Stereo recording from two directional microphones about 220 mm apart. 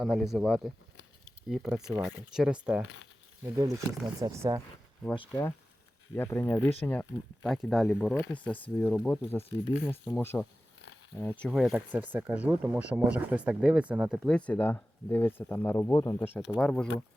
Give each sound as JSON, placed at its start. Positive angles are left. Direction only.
{"t": 0.0, "sound": "speech", "side_deg": 0}
{"t": 3.6, "sound": "speech", "side_deg": -15}
{"t": 5.1, "sound": "speech", "side_deg": 20}
{"t": 6.1, "sound": "speech", "side_deg": 10}